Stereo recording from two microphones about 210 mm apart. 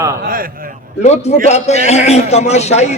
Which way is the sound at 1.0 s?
30° left (ahead or behind).